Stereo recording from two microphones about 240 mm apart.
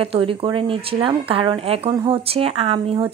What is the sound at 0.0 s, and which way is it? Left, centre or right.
Speech, right.